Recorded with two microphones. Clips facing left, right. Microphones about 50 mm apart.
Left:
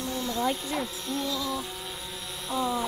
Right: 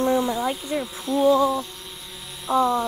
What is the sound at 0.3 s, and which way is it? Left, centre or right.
Speech, centre.